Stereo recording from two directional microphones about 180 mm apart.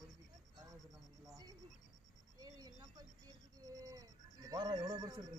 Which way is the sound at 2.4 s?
20° right (ahead or behind).